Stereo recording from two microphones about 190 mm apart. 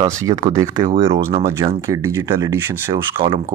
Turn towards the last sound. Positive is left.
turn(degrees=-25)  # may be behind; listen again after turning